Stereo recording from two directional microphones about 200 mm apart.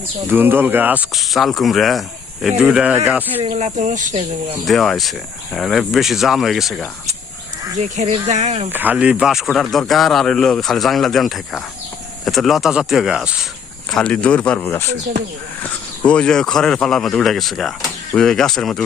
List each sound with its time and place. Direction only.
0.3 s speech: 10° right (ahead or behind)
3.4 s speech: 25° right (ahead or behind)
3.8 s speech: 40° right (ahead or behind)
4.6 s speech: centre (ahead or behind)
7.8 s speech: 35° right (ahead or behind)
8.7 s speech: 10° right (ahead or behind)